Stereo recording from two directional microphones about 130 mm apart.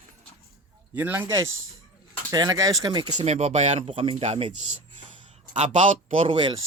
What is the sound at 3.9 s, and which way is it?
Speech, 45° right (ahead or behind).